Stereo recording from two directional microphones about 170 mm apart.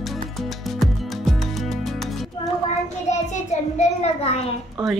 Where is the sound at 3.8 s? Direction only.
40° left (ahead or behind).